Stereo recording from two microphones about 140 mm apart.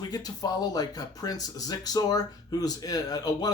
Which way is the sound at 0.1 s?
30° left (ahead or behind).